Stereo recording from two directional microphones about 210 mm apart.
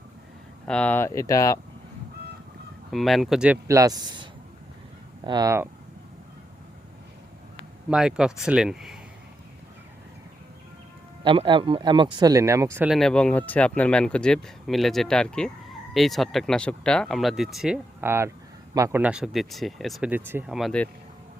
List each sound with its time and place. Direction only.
0.6 s speech: 5° left (ahead or behind)
2.9 s speech: centre (ahead or behind); by 5.6 s 15° right (ahead or behind)
7.9 s speech: 5° right (ahead or behind)
11.2 s speech: 25° right (ahead or behind); by 20.9 s 5° left (ahead or behind)